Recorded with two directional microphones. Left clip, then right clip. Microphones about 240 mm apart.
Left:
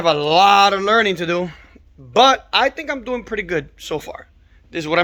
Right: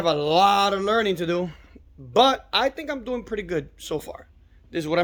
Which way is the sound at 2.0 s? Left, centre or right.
Centre.